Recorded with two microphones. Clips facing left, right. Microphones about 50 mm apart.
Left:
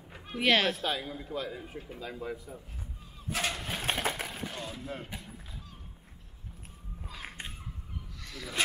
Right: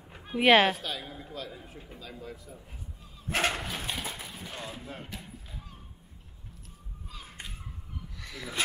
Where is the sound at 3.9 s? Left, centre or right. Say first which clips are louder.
Left 5 dB; left.